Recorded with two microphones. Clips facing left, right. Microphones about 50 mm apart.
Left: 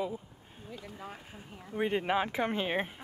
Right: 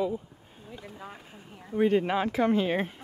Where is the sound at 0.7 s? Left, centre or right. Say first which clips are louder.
Right 1 dB; right.